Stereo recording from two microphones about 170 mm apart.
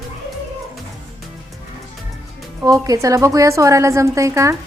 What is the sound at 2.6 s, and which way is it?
A woman's voice, 20° right (ahead or behind).